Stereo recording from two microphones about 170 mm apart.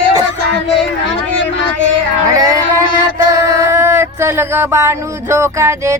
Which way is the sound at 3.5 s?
15° right (ahead or behind).